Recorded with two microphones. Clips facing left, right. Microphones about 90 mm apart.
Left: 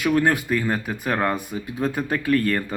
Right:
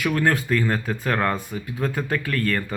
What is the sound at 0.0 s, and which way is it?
Speech, 20° left (ahead or behind).